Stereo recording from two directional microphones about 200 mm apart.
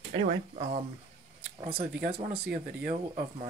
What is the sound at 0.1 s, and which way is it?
Speech, 35° right (ahead or behind).